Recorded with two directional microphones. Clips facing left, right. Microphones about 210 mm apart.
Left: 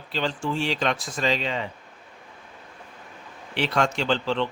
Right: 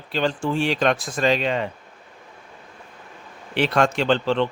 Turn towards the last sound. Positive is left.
turn(degrees=-55)  # may be behind; listen again after turning